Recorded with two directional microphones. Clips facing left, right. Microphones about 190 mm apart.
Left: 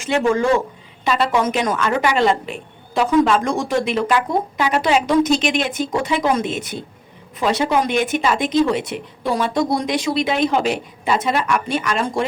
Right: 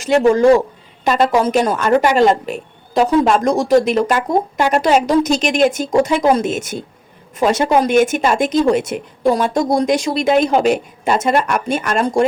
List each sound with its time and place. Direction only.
0.0 s a woman's voice: 40° right (ahead or behind)